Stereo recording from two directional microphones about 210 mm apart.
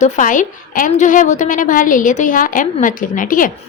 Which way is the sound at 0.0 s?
40° left (ahead or behind).